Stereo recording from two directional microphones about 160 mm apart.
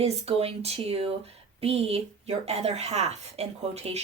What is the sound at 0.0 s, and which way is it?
Speech, 40° right (ahead or behind).